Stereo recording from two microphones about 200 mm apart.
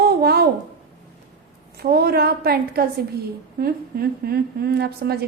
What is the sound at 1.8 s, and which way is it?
A woman's voice, 50° right (ahead or behind).